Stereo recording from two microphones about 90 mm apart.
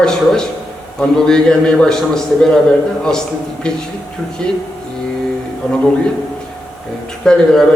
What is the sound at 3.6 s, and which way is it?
Speech, 10° left (ahead or behind).